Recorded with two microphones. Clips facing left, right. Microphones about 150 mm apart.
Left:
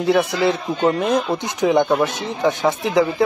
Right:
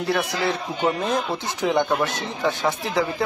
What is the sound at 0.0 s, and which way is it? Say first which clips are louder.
Speech: left 6 dB; 20° left (ahead or behind).